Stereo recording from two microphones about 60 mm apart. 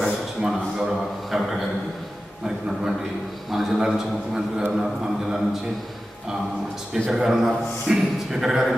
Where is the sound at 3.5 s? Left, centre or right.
Centre.